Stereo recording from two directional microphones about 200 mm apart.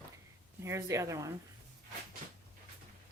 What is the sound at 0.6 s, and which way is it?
Speech, 15° right (ahead or behind).